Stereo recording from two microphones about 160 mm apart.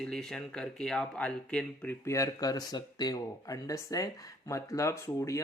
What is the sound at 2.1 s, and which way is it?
Speech, 20° left (ahead or behind).